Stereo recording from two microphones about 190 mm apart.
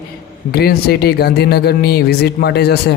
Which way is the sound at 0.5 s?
55° left (ahead or behind).